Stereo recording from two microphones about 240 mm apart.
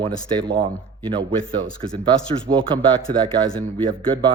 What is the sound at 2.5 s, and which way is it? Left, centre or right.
Speech, right.